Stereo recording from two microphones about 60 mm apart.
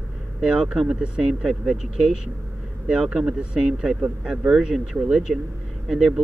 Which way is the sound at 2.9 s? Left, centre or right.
Centre.